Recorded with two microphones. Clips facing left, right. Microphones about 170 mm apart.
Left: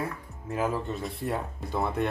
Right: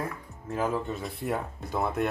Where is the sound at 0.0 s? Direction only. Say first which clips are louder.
Left 1 dB; 10° left (ahead or behind).